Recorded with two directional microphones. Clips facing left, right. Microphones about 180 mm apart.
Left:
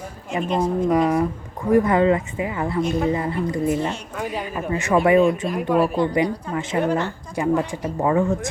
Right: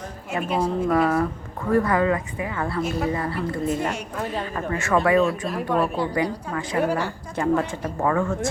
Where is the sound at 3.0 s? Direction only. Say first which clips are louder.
Left 3 dB; 20° left (ahead or behind).